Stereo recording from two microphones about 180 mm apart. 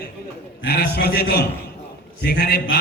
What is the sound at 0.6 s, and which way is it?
A man's voice, 65° left (ahead or behind).